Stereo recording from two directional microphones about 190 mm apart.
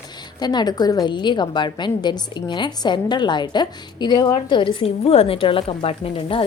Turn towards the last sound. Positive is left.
turn(degrees=30)  # may be behind; listen again after turning